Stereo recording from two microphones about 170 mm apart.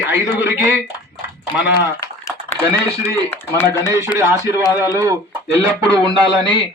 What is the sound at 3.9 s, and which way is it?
A man's voice, 15° right (ahead or behind).